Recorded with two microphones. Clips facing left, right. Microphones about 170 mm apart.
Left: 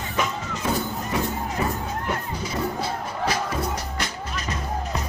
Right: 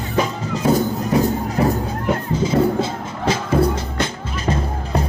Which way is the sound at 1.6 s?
65° right (ahead or behind).